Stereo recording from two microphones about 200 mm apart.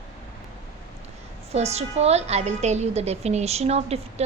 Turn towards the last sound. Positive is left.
turn(degrees=-30)  # may be behind; listen again after turning